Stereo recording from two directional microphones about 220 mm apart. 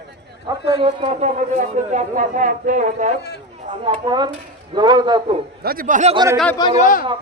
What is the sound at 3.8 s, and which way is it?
Speech, 20° right (ahead or behind).